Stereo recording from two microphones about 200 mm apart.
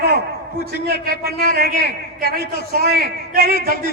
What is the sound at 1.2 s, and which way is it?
A man's voice, 50° right (ahead or behind).